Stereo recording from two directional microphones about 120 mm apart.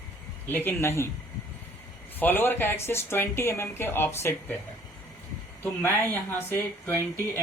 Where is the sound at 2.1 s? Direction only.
15° left (ahead or behind).